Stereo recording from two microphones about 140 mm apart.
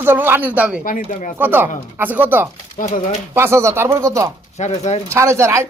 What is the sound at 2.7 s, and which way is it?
Speech, 60° left (ahead or behind).